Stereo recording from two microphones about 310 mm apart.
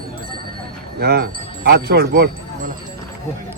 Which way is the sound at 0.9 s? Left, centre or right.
Right.